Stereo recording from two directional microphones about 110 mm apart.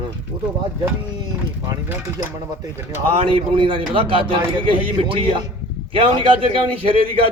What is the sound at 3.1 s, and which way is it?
A man's voice, 55° right (ahead or behind).